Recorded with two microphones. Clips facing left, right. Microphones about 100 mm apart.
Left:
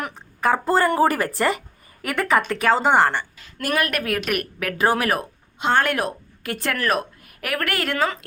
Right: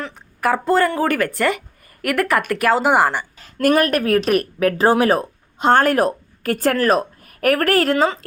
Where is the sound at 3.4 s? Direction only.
40° right (ahead or behind).